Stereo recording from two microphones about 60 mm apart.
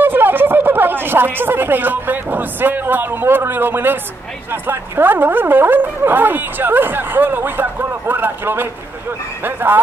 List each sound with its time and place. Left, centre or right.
0.0 s speech: right